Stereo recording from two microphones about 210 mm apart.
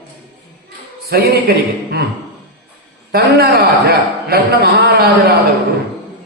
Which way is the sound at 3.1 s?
50° right (ahead or behind).